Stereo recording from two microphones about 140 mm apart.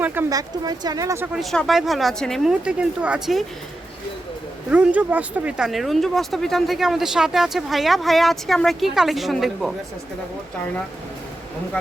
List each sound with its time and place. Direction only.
0.0 s a sound: 15° right (ahead or behind)
0.3 s speech: 25° right (ahead or behind)
1.3 s speech: centre (ahead or behind)
4.7 s speech: 10° right (ahead or behind)